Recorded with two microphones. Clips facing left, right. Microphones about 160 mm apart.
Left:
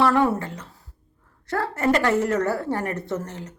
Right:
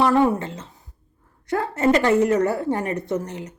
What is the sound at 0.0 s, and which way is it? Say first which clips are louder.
A woman's voice: right 2 dB; 15° right (ahead or behind).